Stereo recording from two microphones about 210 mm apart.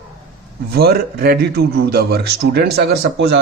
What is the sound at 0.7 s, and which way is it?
Speech, 50° right (ahead or behind).